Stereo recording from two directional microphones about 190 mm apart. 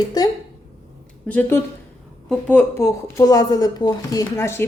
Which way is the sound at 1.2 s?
10° left (ahead or behind).